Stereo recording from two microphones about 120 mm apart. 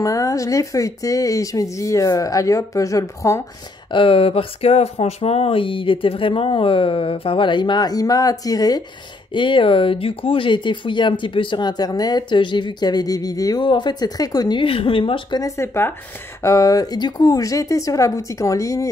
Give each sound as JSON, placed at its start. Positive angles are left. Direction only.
{"t": 0.0, "sound": "speech", "side_deg": 25}
{"t": 3.9, "sound": "speech", "side_deg": 50}
{"t": 14.6, "sound": "speech", "side_deg": 50}
{"t": 15.4, "sound": "speech", "side_deg": 20}